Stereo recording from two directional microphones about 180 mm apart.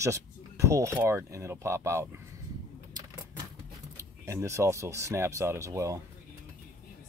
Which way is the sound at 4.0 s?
15° right (ahead or behind).